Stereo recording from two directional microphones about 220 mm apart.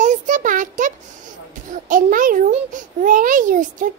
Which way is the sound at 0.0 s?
35° right (ahead or behind).